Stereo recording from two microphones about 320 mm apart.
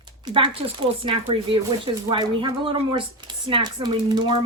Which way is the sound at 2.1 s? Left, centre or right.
Centre.